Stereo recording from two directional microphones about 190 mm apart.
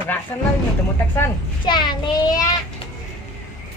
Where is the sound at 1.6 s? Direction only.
25° left (ahead or behind).